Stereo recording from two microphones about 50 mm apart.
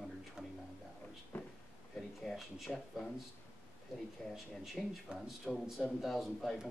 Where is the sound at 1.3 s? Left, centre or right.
Left.